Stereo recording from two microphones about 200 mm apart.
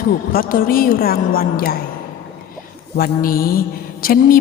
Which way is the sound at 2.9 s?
45° left (ahead or behind).